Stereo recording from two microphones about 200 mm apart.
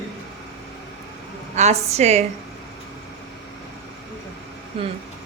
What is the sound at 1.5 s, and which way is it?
Speech, 35° right (ahead or behind).